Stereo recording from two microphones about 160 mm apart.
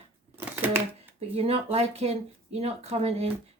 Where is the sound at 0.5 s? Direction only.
10° right (ahead or behind).